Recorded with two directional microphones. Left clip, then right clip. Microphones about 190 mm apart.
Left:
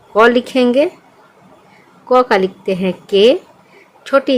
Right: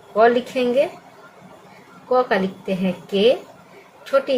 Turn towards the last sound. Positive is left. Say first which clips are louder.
# left 5 dB
turn(degrees=55)  # may be behind; listen again after turning